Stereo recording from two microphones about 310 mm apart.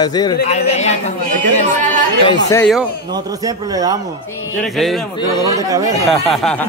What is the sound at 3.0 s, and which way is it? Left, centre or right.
Speech, centre.